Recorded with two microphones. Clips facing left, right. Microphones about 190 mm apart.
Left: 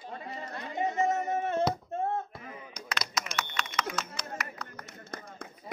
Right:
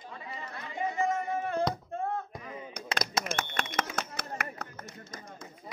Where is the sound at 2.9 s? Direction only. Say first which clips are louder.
Right 3 dB; 50° right (ahead or behind).